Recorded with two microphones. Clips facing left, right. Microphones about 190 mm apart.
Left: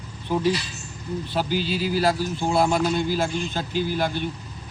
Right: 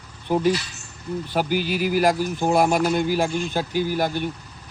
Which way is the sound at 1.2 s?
15° right (ahead or behind).